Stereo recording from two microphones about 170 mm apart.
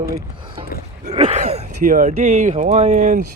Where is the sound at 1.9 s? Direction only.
45° right (ahead or behind).